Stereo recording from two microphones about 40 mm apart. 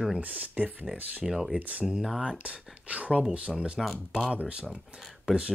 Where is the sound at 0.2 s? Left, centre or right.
Right.